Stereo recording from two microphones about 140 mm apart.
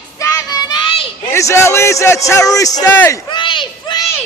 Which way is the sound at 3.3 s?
35° left (ahead or behind).